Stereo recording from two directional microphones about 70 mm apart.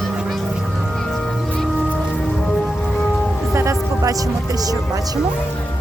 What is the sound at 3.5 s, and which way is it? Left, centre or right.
Music, right.